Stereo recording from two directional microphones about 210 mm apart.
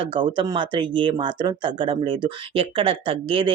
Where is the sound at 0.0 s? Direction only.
25° right (ahead or behind).